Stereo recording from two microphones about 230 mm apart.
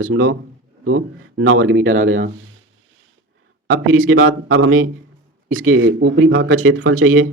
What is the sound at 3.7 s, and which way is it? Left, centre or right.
Speech, right.